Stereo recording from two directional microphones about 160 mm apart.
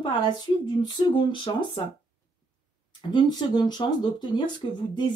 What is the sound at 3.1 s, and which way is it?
Speech, 25° left (ahead or behind).